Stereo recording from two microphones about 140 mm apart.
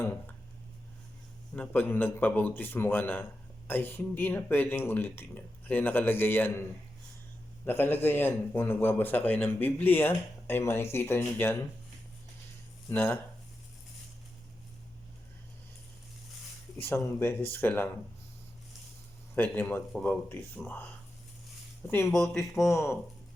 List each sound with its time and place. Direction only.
1.5 s a man's voice: 10° left (ahead or behind)
7.6 s a man's voice: 15° left (ahead or behind)
12.9 s a man's voice: 15° left (ahead or behind)
16.8 s a man's voice: 15° left (ahead or behind)
19.4 s a man's voice: 15° left (ahead or behind)
22.1 s speech: centre (ahead or behind)
22.4 s speech: 20° left (ahead or behind)